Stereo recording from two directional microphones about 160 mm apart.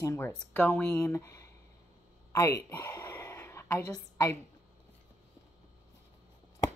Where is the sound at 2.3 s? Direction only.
20° left (ahead or behind).